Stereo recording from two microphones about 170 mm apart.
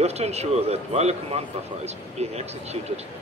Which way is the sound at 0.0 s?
40° right (ahead or behind).